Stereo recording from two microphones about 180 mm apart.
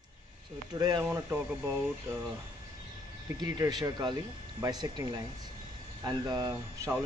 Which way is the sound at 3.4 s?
20° right (ahead or behind).